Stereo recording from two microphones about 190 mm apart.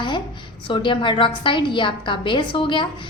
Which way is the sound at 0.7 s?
25° left (ahead or behind).